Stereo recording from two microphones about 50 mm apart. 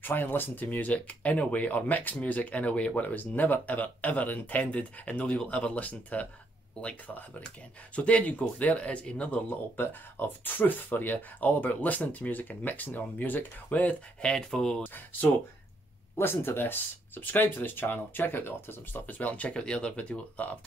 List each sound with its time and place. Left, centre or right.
0.0 s speech: left
9.5 s speech: left
14.5 s speech: centre
16.2 s speech: left
19.1 s speech: left
19.5 s speech: centre